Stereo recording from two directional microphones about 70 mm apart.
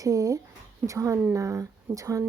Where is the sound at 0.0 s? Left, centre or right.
Right.